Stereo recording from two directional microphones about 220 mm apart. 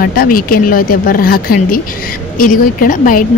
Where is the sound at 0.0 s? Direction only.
40° left (ahead or behind).